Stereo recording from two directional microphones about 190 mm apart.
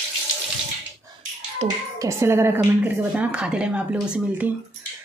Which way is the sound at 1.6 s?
35° right (ahead or behind).